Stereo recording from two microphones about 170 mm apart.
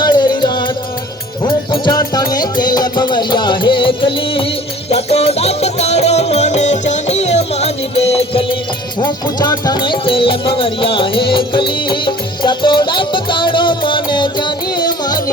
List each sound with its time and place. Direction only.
0.0 s music: 25° left (ahead or behind)